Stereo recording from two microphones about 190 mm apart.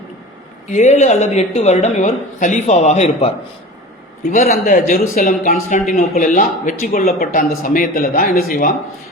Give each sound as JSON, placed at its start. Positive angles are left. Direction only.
{"t": 0.7, "sound": "a woman's voice", "side_deg": 40}
{"t": 4.3, "sound": "speech", "side_deg": 45}